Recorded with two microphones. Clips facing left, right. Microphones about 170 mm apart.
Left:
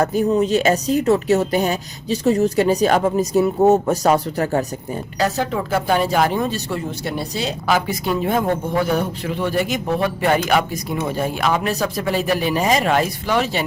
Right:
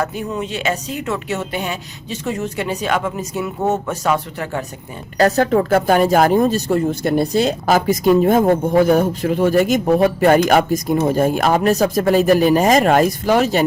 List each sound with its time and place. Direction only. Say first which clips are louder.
0.0 s speech: left 6 dB; 40° left (ahead or behind)
5.1 s speech: right 7 dB; 50° right (ahead or behind)